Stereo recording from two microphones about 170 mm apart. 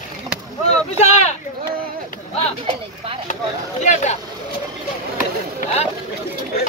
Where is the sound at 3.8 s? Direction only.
45° left (ahead or behind).